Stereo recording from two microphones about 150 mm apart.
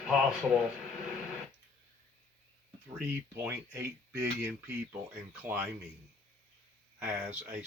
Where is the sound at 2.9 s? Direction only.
15° right (ahead or behind).